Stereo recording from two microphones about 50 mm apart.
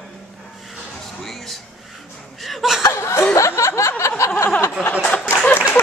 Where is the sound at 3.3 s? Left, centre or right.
Left.